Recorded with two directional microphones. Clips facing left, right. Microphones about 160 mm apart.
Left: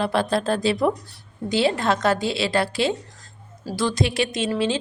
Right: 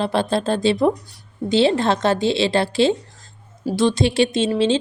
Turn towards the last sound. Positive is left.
turn(degrees=-25)  # may be behind; listen again after turning